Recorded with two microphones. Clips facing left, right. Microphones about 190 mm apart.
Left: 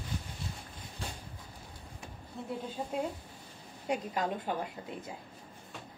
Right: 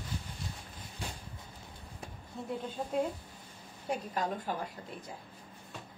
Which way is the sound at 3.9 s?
15° left (ahead or behind).